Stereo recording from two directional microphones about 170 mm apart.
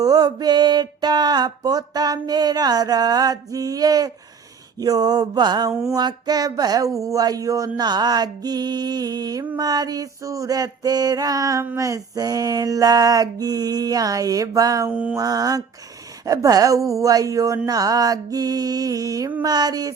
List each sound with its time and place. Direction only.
0.0 s music: 20° right (ahead or behind)
14.8 s mantra: 10° right (ahead or behind)
15.2 s music: 20° right (ahead or behind)